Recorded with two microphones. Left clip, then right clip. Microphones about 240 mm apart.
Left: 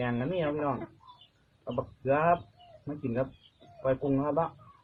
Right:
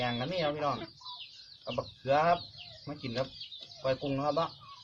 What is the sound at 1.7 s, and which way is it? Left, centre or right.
Speech, centre.